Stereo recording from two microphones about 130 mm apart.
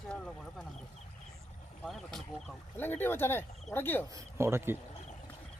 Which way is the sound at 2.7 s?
15° left (ahead or behind).